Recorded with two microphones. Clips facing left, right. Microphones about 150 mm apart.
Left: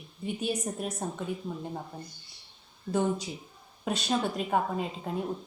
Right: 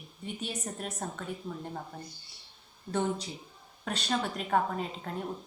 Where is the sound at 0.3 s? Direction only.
10° left (ahead or behind).